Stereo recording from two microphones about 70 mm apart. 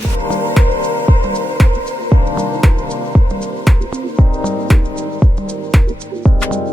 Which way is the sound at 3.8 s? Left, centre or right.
Centre.